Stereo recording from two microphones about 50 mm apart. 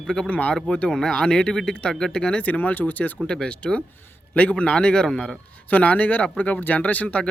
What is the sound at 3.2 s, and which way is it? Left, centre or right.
Speech, centre.